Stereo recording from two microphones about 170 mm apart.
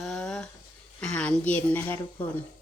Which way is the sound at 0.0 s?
5° left (ahead or behind).